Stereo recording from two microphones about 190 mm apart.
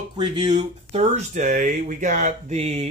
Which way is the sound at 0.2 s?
30° right (ahead or behind).